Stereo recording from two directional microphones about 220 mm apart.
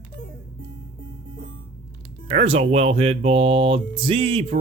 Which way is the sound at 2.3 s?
25° right (ahead or behind).